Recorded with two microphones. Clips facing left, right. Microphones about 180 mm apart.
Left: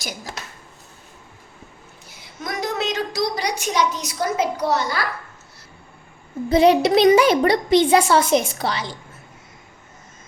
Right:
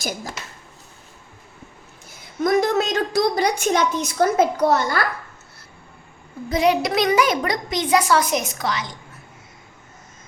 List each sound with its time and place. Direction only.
2.4 s a woman's voice: 45° right (ahead or behind)
6.5 s a child's voice: 30° left (ahead or behind)